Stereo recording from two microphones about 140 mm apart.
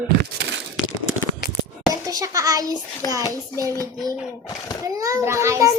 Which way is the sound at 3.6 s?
25° right (ahead or behind).